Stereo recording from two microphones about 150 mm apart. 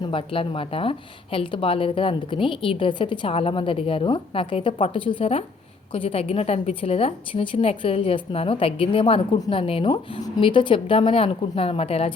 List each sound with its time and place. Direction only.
0.0 s a woman's voice: 35° left (ahead or behind)